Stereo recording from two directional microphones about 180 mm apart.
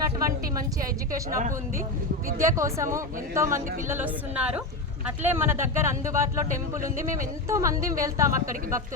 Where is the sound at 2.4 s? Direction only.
15° right (ahead or behind).